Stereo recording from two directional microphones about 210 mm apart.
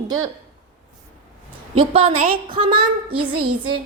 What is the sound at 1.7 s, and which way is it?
A woman's voice, 30° right (ahead or behind).